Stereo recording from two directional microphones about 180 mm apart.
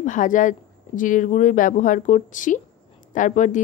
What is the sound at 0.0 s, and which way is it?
A woman's voice, 45° left (ahead or behind).